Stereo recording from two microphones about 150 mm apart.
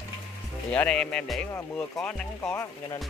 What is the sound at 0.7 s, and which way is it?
Speech, 5° left (ahead or behind).